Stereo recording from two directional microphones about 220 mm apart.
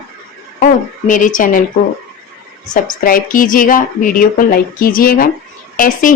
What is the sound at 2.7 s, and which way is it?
A woman's voice, 40° left (ahead or behind).